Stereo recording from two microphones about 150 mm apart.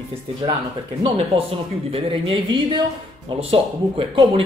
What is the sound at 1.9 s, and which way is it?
Speech, 40° right (ahead or behind).